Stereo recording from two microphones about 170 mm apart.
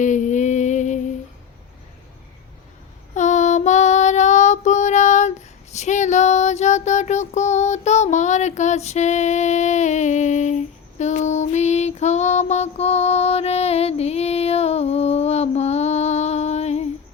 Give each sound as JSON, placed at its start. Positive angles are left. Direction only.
{"t": 0.0, "sound": "music", "side_deg": 45}
{"t": 3.2, "sound": "child singing", "side_deg": 45}